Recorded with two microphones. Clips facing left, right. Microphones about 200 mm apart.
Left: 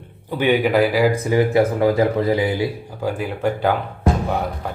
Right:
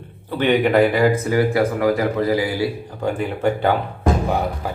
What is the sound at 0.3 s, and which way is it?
Speech, 10° left (ahead or behind).